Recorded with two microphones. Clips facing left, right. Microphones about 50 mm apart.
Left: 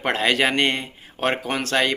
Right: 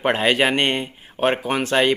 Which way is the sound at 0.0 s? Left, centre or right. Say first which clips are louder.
Right 2 dB; centre.